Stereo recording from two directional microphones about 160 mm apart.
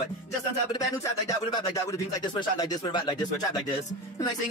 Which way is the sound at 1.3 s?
25° left (ahead or behind).